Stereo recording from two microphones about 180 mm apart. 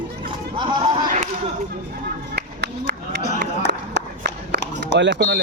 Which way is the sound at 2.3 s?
65° right (ahead or behind).